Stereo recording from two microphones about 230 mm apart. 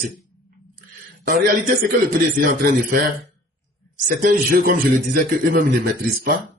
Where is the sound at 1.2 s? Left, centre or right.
Right.